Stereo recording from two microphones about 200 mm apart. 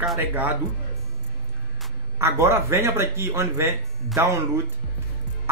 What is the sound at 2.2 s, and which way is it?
A man's voice, 15° right (ahead or behind).